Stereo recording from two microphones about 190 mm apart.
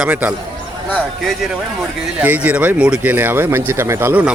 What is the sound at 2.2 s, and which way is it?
Speech, 10° right (ahead or behind).